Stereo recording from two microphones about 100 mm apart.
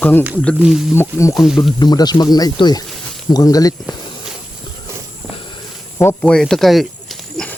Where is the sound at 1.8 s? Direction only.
45° left (ahead or behind).